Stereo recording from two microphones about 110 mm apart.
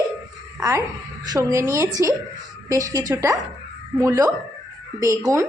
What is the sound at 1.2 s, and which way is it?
A woman's voice, 35° right (ahead or behind).